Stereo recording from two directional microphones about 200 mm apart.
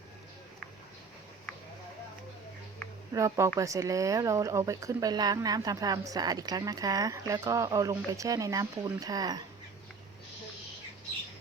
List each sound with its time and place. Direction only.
3.1 s speech: 15° right (ahead or behind)